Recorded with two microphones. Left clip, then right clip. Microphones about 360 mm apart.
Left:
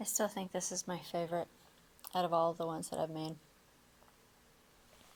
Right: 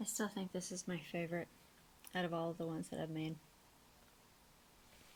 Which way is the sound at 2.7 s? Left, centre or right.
Left.